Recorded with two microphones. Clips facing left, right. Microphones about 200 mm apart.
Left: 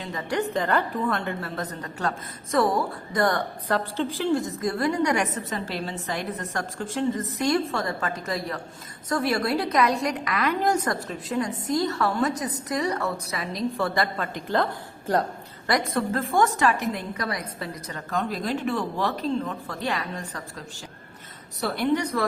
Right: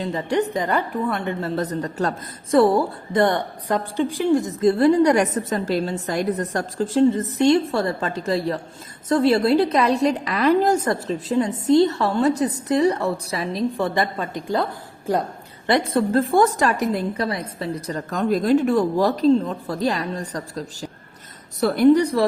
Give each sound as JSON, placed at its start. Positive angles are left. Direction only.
{"t": 0.0, "sound": "a woman's voice", "side_deg": -30}
{"t": 0.5, "sound": "a woman's voice", "side_deg": -15}
{"t": 1.5, "sound": "a woman's voice", "side_deg": -35}
{"t": 15.6, "sound": "a woman's voice", "side_deg": -30}